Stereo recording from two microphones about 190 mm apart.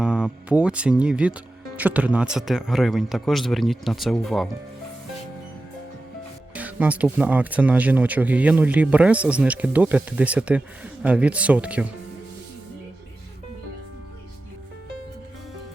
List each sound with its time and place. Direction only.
0.0 s speech: 5° right (ahead or behind)
6.5 s speech: 10° right (ahead or behind)